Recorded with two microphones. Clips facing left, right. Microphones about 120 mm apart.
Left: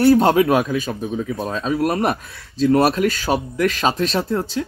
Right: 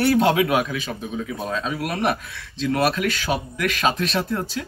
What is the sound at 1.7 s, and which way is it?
Speech, 25° left (ahead or behind).